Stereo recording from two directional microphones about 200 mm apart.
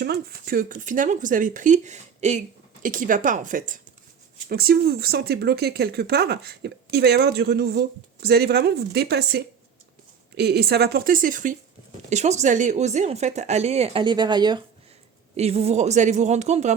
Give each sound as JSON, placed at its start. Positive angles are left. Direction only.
{"t": 0.0, "sound": "speech", "side_deg": -50}
{"t": 15.4, "sound": "speech", "side_deg": -30}